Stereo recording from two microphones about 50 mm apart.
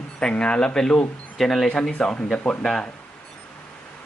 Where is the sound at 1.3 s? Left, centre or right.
Centre.